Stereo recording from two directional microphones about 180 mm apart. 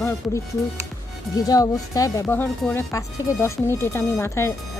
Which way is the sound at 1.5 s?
20° left (ahead or behind).